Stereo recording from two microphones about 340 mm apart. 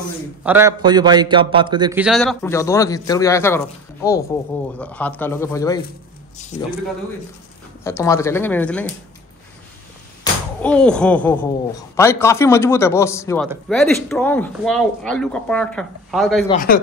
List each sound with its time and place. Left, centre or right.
0.4 s a man's voice: centre
7.8 s speech: centre
10.6 s a man's voice: centre
16.4 s speech: left